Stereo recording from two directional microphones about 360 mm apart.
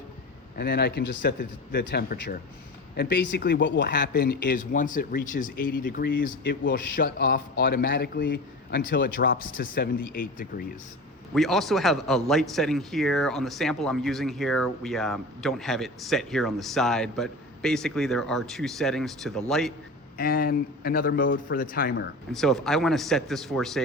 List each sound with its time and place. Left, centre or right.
0.5 s speech: left
11.3 s speech: centre
20.1 s speech: left
22.3 s speech: centre